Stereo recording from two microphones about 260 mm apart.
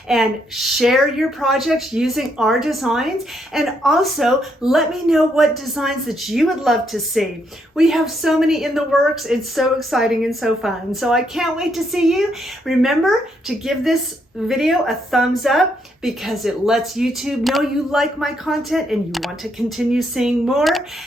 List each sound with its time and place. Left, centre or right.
0.1 s speech: centre
14.4 s speech: centre